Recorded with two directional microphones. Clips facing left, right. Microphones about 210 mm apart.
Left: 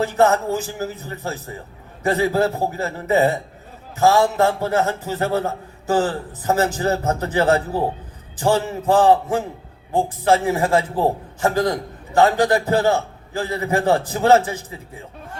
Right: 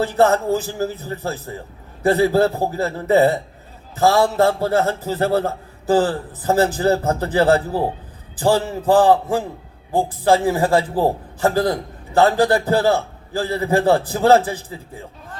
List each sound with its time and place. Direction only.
0.0 s a man's voice: 35° right (ahead or behind)